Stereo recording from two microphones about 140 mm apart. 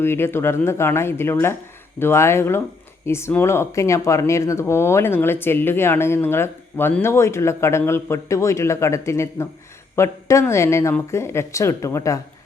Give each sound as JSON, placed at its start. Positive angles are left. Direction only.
{"t": 0.0, "sound": "speech", "side_deg": 15}